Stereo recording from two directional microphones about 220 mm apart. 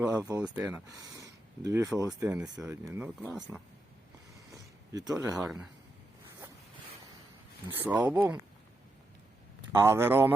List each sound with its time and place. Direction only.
0.0 s speech: 10° right (ahead or behind)
1.2 s a sound: 15° right (ahead or behind)
2.2 s speech: 5° right (ahead or behind)
4.5 s a sound: 15° right (ahead or behind)
5.1 s speech: 15° right (ahead or behind)
5.4 s speech: 5° right (ahead or behind)
7.8 s speech: 5° right (ahead or behind)
9.7 s speech: 10° right (ahead or behind)